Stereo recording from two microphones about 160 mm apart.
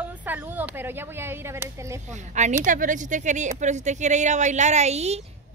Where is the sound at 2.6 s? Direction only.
55° right (ahead or behind).